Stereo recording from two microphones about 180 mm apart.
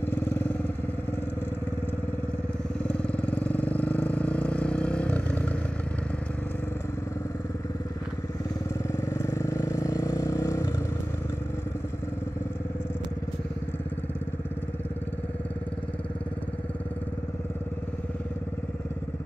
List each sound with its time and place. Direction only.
0.0 s vehicle: 10° left (ahead or behind)
2.9 s vehicle: 5° left (ahead or behind)
8.9 s vehicle: 15° left (ahead or behind)